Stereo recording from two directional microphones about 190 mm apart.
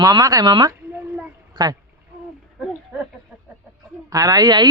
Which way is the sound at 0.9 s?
10° right (ahead or behind).